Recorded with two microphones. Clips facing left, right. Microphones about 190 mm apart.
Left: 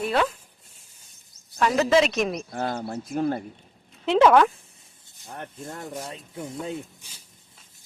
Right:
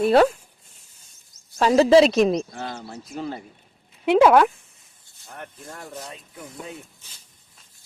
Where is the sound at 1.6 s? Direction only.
30° right (ahead or behind).